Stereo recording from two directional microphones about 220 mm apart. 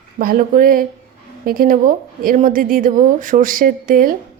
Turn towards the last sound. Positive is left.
turn(degrees=-40)  # may be behind; listen again after turning